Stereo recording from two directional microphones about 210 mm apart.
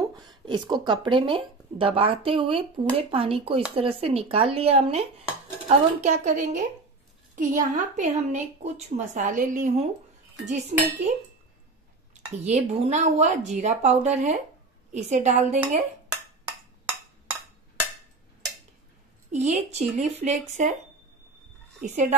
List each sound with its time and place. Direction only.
0.0 s a woman's voice: 20° right (ahead or behind)
12.4 s a woman's voice: 30° right (ahead or behind)
19.3 s a woman's voice: 35° right (ahead or behind)
21.8 s a woman's voice: 35° right (ahead or behind)